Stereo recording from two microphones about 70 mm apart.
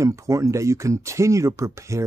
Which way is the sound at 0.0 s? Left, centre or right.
Right.